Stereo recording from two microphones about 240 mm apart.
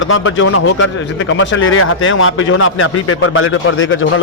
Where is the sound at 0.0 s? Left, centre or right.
Left.